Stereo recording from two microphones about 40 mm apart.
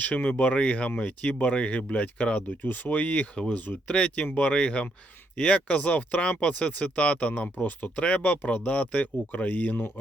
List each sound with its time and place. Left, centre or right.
0.0 s speech: left
3.9 s speech: left